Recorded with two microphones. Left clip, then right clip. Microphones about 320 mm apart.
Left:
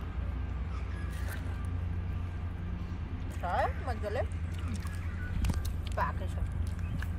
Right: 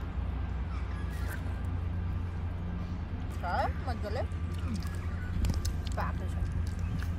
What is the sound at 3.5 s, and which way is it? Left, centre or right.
Speech, left.